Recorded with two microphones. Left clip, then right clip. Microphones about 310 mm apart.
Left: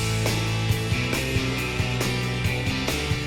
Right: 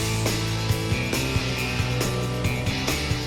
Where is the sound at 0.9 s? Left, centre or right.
Centre.